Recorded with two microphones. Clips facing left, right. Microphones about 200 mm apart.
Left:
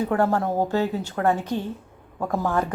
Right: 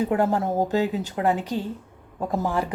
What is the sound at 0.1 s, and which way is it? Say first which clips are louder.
A woman's voice: even; 20° right (ahead or behind).